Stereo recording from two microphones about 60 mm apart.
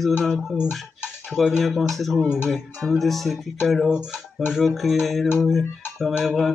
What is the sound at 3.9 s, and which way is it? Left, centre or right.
Speech, centre.